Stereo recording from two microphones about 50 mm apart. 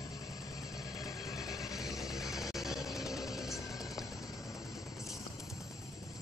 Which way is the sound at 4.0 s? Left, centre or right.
Centre.